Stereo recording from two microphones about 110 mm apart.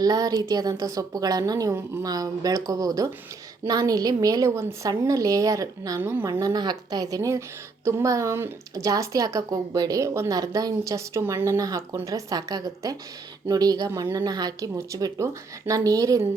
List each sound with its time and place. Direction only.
0.0 s a woman's voice: 35° right (ahead or behind)
6.0 s speech: 20° right (ahead or behind)
6.4 s a woman's voice: 40° right (ahead or behind)